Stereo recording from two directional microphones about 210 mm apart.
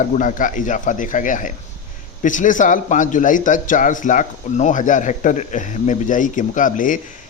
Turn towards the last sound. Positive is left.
turn(degrees=40)  # may be behind; listen again after turning